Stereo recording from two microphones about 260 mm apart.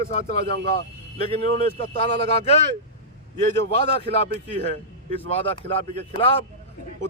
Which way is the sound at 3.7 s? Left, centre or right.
Left.